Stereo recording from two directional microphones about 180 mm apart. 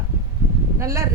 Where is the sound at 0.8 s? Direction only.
15° right (ahead or behind).